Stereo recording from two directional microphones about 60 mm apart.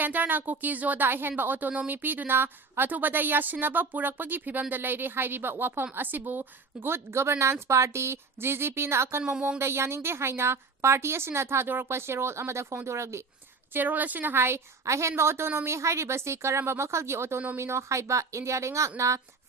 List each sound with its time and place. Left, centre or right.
0.0 s a woman's voice: right
13.7 s a woman's voice: right